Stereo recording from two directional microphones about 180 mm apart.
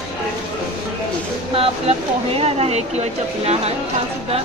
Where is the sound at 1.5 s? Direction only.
35° right (ahead or behind).